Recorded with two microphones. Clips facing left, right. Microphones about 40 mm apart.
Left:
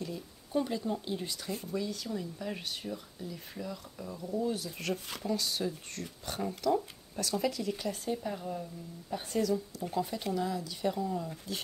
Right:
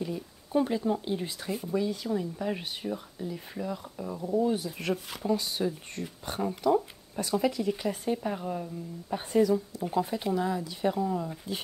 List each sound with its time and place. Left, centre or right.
0.0 s speech: centre